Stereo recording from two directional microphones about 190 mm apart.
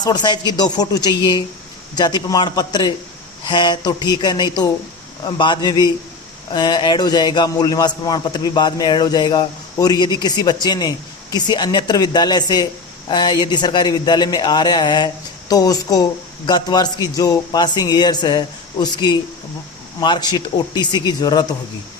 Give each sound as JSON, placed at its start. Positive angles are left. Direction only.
{"t": 0.0, "sound": "a man's voice", "side_deg": 20}